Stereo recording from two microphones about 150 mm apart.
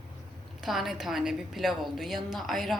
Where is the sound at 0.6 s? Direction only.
Centre (ahead or behind).